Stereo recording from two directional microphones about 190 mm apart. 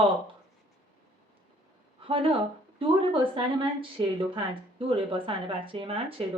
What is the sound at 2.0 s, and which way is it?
Speech, 30° right (ahead or behind).